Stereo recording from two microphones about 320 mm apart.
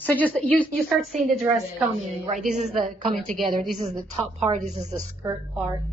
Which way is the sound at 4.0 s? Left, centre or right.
Centre.